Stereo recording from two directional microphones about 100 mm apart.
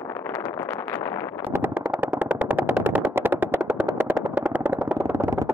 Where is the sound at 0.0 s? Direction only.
25° left (ahead or behind).